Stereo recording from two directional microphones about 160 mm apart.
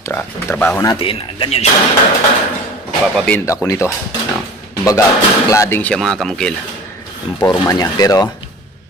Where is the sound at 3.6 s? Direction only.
20° left (ahead or behind).